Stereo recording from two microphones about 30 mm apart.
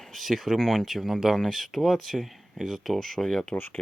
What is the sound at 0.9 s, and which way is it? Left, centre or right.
Speech, centre.